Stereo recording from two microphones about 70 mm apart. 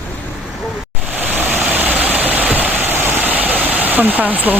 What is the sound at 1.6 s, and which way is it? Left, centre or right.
Vehicle, right.